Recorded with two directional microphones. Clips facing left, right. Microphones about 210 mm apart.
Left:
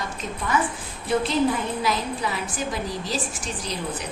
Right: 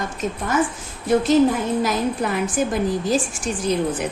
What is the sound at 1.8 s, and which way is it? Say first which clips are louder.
A woman's voice: right 5 dB; 50° right (ahead or behind).